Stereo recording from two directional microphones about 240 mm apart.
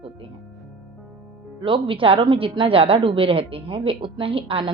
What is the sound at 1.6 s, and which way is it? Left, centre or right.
A woman's voice, right.